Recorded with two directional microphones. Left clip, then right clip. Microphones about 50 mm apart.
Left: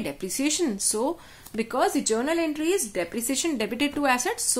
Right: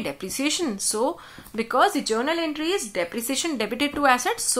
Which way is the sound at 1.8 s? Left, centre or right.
Left.